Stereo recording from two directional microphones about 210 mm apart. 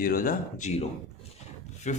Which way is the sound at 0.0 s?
45° left (ahead or behind).